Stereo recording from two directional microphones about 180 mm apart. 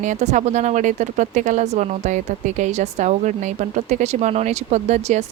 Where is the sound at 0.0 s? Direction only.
40° right (ahead or behind).